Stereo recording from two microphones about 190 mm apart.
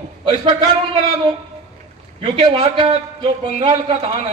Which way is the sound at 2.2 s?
25° right (ahead or behind).